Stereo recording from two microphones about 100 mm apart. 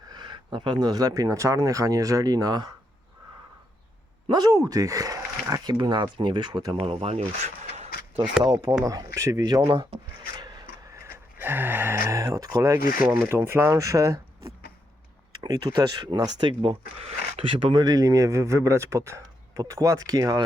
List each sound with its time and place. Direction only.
0.1 s speech: 50° right (ahead or behind)
4.3 s speech: 45° right (ahead or behind)
5.7 s speech: 50° right (ahead or behind)
6.7 s speech: 80° right
8.8 s speech: 35° right (ahead or behind)
10.2 s rub: 45° right (ahead or behind)
11.3 s speech: 20° right (ahead or behind)
15.4 s speech: 40° right (ahead or behind); by 17.8 s 60° right (ahead or behind)
17.8 s speech: 35° right (ahead or behind)